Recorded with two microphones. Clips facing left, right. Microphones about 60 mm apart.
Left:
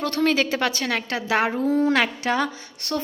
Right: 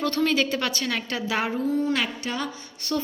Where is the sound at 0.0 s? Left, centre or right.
Left.